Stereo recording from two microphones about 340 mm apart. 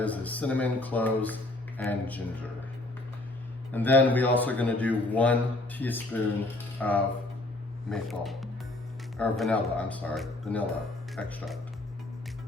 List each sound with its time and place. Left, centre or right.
0.0 s a man's voice: centre
3.7 s a man's voice: centre